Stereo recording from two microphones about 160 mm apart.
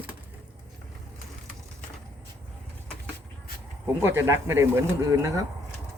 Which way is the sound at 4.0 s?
15° right (ahead or behind).